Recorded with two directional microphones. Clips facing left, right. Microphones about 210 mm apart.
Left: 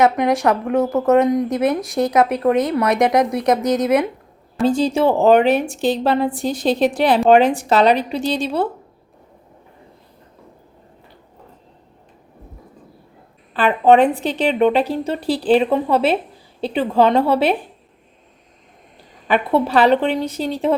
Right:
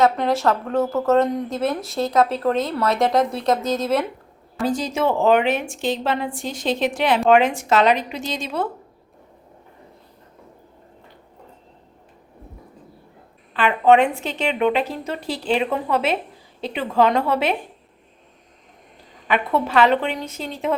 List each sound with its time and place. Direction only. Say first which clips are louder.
0.0 s speech: left 3 dB; 15° left (ahead or behind)
4.6 s a woman's voice: left 5 dB; 30° left (ahead or behind)
13.5 s a woman's voice: left 2 dB; 35° left (ahead or behind)
19.3 s a woman's voice: left 4 dB; 30° left (ahead or behind)